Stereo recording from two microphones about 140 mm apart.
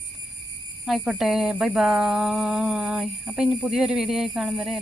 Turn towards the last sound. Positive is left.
turn(degrees=0)  # may be behind; listen again after turning